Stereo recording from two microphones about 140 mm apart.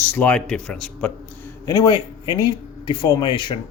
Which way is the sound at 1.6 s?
25° left (ahead or behind).